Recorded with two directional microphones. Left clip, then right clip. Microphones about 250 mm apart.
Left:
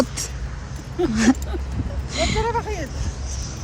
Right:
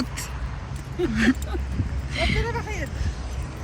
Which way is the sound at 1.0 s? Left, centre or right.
Centre.